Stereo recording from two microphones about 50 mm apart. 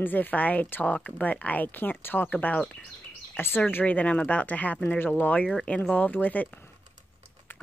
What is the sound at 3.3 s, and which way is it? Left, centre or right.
Speech, left.